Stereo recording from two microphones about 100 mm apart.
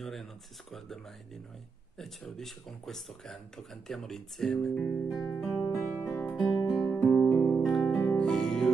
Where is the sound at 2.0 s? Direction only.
Centre (ahead or behind).